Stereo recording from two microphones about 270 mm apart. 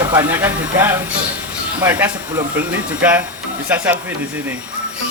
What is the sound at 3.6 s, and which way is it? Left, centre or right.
Speech, centre.